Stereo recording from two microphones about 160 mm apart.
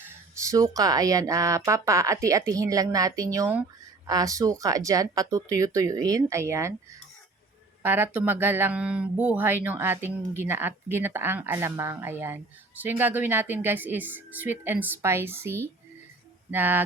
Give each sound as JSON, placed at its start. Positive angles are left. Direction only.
{"t": 0.0, "sound": "speech", "side_deg": -15}
{"t": 7.8, "sound": "speech", "side_deg": -15}